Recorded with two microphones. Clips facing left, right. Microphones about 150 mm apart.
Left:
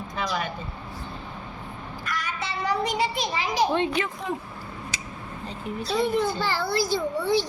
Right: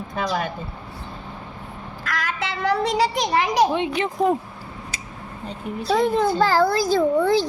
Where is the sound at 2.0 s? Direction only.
90° right.